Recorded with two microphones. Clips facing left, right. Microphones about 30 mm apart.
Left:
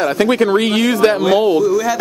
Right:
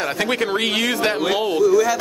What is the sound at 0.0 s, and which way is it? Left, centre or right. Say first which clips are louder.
Speech: left 7 dB; centre.